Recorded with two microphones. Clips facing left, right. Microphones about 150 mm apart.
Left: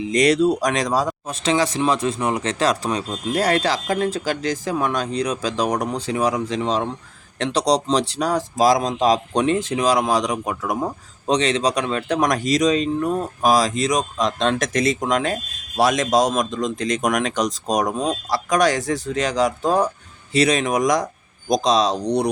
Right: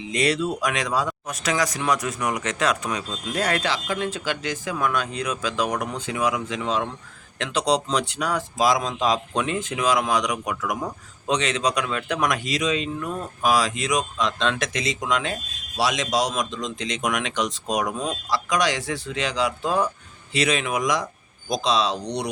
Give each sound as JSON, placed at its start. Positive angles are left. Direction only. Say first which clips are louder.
{"t": 0.1, "sound": "speech", "louder": "left 7 dB", "side_deg": 40}